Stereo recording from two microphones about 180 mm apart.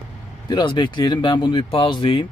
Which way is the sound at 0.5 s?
25° left (ahead or behind).